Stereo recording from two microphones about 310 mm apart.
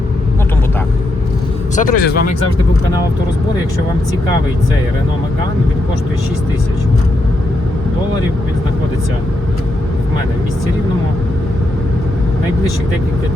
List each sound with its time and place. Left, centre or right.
1.7 s speech: left